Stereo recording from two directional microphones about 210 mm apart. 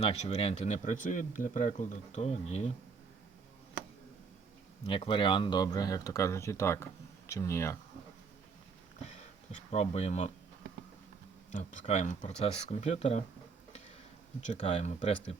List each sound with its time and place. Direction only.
0.0 s speech: 30° left (ahead or behind)
4.9 s speech: 25° left (ahead or behind)
9.0 s speech: 30° left (ahead or behind)
11.5 s speech: 35° left (ahead or behind)
14.4 s speech: 35° left (ahead or behind)